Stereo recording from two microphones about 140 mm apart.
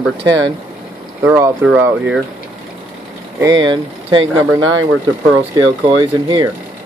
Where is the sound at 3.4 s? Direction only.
30° right (ahead or behind).